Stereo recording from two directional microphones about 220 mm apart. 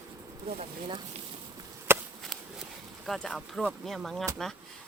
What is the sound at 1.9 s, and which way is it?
Chop, 10° right (ahead or behind).